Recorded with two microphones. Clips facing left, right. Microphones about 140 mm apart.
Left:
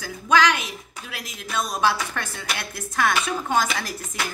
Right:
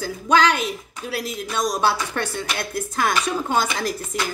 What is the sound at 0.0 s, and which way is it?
Speech, 35° right (ahead or behind).